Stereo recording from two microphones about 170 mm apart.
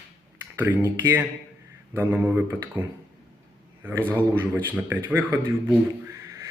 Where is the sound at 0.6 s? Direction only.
10° right (ahead or behind).